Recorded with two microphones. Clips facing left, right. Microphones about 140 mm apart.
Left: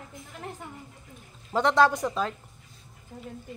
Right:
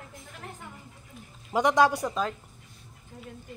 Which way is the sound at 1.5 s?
15° right (ahead or behind).